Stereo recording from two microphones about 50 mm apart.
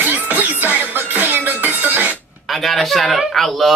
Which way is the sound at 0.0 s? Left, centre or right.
Right.